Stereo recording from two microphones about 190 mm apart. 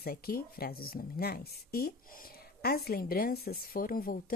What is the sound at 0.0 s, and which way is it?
Speech, 55° left (ahead or behind).